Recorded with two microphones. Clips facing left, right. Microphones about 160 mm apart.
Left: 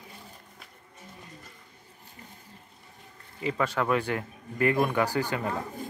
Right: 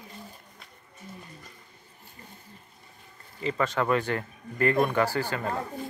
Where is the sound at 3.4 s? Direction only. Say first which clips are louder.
Right 1 dB; 10° left (ahead or behind).